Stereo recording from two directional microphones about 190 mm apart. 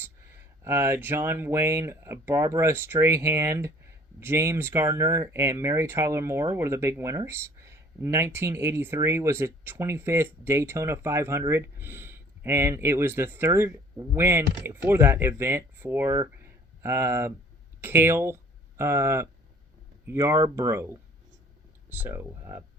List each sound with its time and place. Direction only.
0.0 s speech: 10° right (ahead or behind)